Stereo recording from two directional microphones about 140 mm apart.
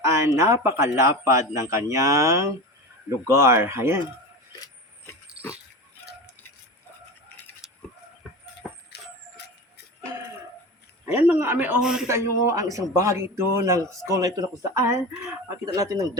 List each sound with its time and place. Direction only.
0.0 s speech: 20° right (ahead or behind)
5.4 s pig: 10° right (ahead or behind)
7.6 s chicken: centre (ahead or behind)
8.6 s vehicle: centre (ahead or behind)
11.0 s a sound: 15° right (ahead or behind)
11.3 s speech: 15° right (ahead or behind)
11.8 s a man's voice: 5° right (ahead or behind)
12.0 s speech: 20° right (ahead or behind)